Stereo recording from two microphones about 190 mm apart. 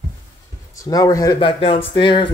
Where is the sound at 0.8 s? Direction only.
15° left (ahead or behind).